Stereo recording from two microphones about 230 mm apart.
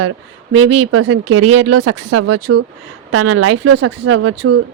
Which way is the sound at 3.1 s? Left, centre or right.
Right.